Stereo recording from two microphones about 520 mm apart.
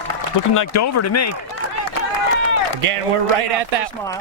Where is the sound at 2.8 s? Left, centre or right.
Right.